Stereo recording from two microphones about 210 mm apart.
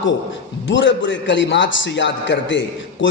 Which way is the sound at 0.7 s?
60° left (ahead or behind).